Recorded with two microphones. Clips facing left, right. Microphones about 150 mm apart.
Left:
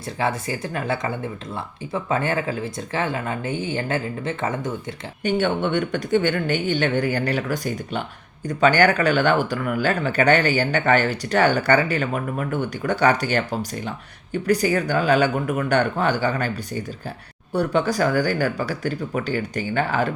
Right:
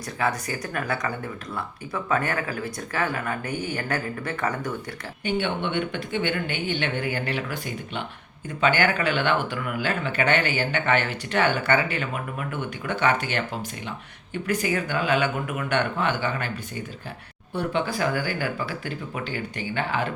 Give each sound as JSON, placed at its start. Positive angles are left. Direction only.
{"t": 0.2, "sound": "speech", "side_deg": 25}
{"t": 5.2, "sound": "speech", "side_deg": 45}
{"t": 17.5, "sound": "speech", "side_deg": 40}